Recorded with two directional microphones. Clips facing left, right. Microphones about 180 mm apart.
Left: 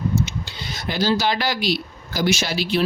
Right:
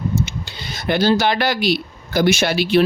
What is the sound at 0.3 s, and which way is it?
Speech, 60° right (ahead or behind).